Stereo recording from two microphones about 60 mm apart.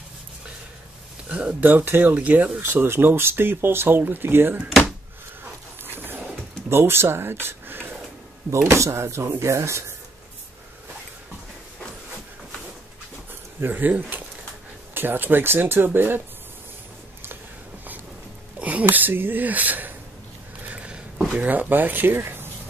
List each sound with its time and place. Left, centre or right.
1.3 s speech: right
2.6 s speech: right
5.9 s a sound: right
6.7 s speech: right
8.7 s speech: right
13.3 s speech: right
18.6 s speech: right
20.6 s a sound: right
21.4 s speech: right